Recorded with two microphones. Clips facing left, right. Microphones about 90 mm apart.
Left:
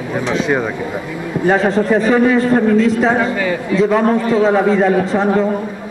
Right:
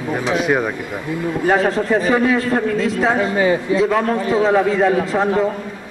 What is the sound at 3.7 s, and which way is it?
Speech, 25° right (ahead or behind).